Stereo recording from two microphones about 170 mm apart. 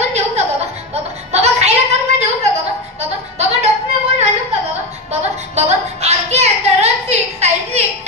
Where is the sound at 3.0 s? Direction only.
40° right (ahead or behind).